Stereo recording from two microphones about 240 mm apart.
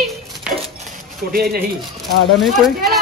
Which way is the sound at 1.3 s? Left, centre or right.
Right.